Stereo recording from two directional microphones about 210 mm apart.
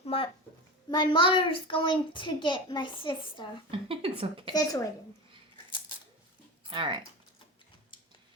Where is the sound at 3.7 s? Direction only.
25° right (ahead or behind).